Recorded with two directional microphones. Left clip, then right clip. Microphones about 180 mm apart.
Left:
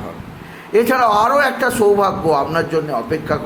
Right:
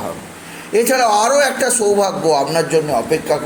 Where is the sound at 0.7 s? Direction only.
Centre (ahead or behind).